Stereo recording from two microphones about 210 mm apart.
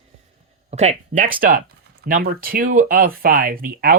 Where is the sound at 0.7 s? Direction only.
30° right (ahead or behind).